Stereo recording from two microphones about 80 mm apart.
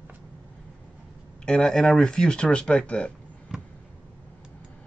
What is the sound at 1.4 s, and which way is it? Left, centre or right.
Speech, centre.